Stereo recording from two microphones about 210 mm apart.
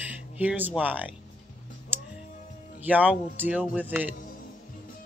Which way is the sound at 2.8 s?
5° right (ahead or behind).